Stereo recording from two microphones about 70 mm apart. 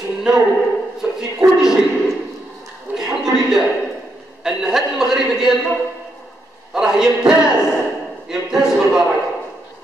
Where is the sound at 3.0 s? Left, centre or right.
Centre.